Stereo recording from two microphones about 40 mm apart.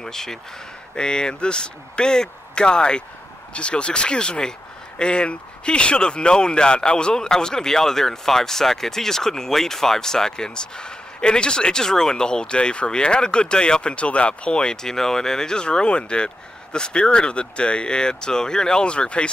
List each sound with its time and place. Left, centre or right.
0.0 s speech: centre
0.9 s speech: left